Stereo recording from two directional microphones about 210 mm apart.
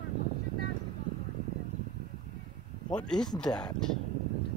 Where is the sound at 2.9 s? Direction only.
5° left (ahead or behind).